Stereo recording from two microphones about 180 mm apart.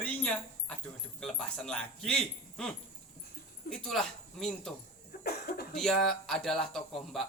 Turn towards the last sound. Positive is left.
turn(degrees=0)  # may be behind; listen again after turning